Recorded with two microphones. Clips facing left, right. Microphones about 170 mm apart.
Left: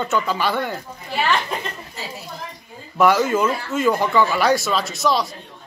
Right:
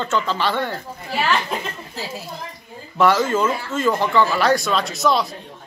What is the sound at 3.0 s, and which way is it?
A man's voice, 10° left (ahead or behind).